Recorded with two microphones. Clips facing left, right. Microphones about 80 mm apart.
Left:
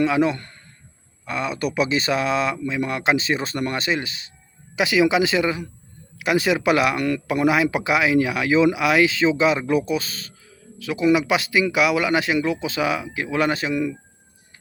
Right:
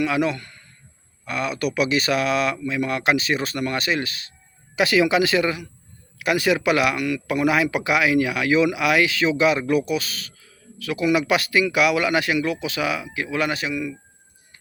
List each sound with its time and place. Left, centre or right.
0.0 s speech: left
7.3 s speech: left